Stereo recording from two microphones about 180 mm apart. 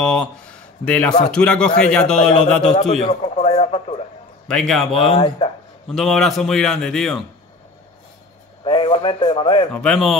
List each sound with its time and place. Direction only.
0.0 s a man's voice: 5° left (ahead or behind)
2.7 s speech: 40° left (ahead or behind)
4.5 s a man's voice: 5° left (ahead or behind)
4.9 s speech: 35° left (ahead or behind)
5.9 s a man's voice: centre (ahead or behind)
8.6 s a man's voice: 30° left (ahead or behind)
9.7 s a man's voice: 5° left (ahead or behind)